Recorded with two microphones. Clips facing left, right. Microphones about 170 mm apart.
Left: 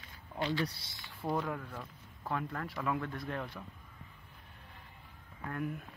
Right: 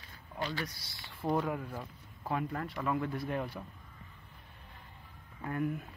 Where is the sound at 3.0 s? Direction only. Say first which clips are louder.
Right 4 dB; 15° right (ahead or behind).